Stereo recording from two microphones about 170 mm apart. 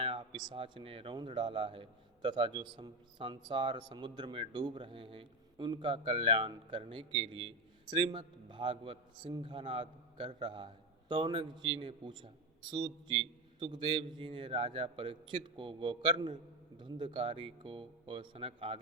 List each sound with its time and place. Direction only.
0.0 s speech: 30° right (ahead or behind)